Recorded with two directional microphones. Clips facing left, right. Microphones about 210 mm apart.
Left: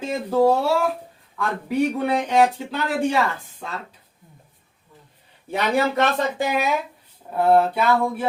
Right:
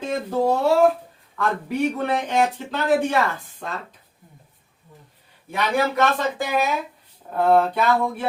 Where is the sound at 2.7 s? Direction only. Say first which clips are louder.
Right 2 dB; 10° left (ahead or behind).